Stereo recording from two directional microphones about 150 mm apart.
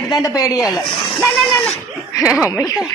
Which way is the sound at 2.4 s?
20° left (ahead or behind).